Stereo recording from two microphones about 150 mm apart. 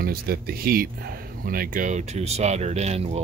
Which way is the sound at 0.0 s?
90° right.